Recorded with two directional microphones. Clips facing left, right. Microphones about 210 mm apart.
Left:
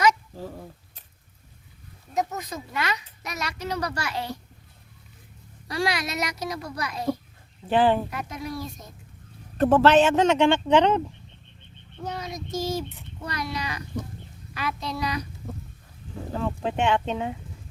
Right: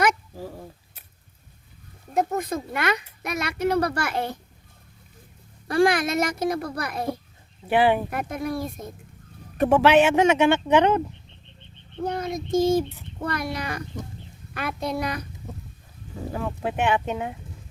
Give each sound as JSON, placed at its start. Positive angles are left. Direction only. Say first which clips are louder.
{"t": 0.3, "sound": "a sound", "louder": "right 1 dB", "side_deg": -10}
{"t": 2.1, "sound": "speech", "louder": "right 5 dB", "side_deg": -55}
{"t": 5.6, "sound": "speech", "louder": "right 7 dB", "side_deg": -50}
{"t": 7.7, "sound": "speech", "louder": "right 1 dB", "side_deg": -10}
{"t": 8.1, "sound": "speech", "louder": "right 5 dB", "side_deg": -55}
{"t": 9.6, "sound": "speech", "louder": "even", "side_deg": -10}
{"t": 12.0, "sound": "speech", "louder": "right 6 dB", "side_deg": -55}
{"t": 16.3, "sound": "speech", "louder": "left 1 dB", "side_deg": -5}